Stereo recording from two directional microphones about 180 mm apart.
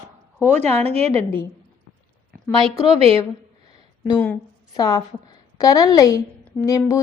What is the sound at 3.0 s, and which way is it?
Speech, 30° right (ahead or behind).